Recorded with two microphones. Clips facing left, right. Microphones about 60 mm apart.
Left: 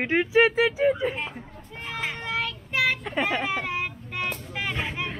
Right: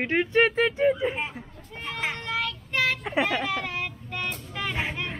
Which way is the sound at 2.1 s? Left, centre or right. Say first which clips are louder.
Even; centre.